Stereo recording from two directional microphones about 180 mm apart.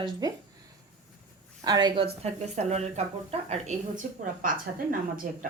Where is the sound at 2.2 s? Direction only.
40° right (ahead or behind).